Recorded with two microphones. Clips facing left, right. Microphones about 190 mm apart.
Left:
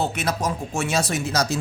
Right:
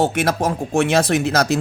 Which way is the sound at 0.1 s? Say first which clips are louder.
Right 6 dB; 50° right (ahead or behind).